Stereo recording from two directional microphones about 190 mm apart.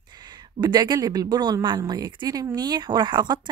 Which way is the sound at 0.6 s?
20° right (ahead or behind).